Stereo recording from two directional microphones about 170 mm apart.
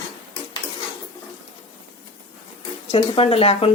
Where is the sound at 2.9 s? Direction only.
35° left (ahead or behind).